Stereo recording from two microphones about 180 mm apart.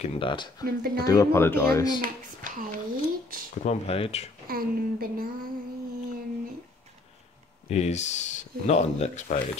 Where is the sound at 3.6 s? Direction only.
35° left (ahead or behind).